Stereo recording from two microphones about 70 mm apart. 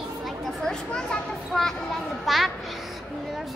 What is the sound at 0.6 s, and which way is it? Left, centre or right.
Speech, centre.